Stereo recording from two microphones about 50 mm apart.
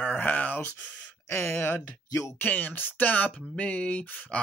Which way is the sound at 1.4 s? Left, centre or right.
Left.